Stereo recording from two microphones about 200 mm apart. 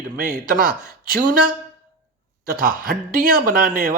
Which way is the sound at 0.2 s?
45° right (ahead or behind).